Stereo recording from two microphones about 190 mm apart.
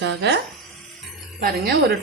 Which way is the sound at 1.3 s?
50° right (ahead or behind).